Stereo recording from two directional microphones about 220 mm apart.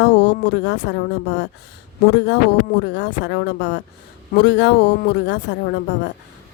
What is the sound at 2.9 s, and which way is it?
Speech, 50° left (ahead or behind).